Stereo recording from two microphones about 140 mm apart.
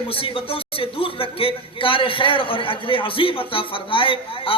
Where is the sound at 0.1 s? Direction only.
40° left (ahead or behind).